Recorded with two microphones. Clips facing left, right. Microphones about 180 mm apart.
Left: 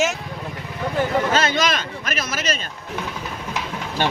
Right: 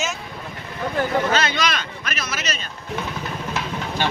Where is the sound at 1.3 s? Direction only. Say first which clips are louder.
Left 2 dB; 45° left (ahead or behind).